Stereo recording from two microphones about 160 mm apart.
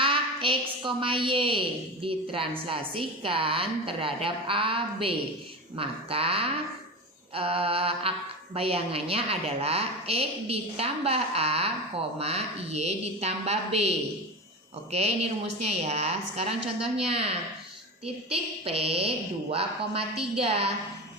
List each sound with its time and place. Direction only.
0.0 s a woman's voice: 35° right (ahead or behind)